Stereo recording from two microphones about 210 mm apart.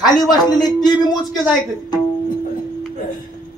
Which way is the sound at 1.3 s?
Centre (ahead or behind).